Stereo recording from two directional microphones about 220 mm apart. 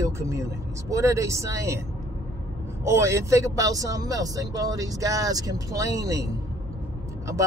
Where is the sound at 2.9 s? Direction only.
15° right (ahead or behind).